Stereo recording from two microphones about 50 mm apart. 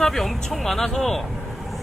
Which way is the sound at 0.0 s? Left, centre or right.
Centre.